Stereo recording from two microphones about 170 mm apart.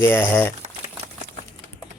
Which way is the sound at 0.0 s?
15° left (ahead or behind).